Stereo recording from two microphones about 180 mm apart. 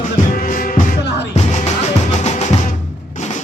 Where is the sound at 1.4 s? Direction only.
40° left (ahead or behind).